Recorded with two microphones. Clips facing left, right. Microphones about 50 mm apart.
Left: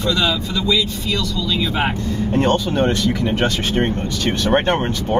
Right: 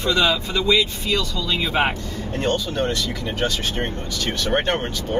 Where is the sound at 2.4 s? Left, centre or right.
Left.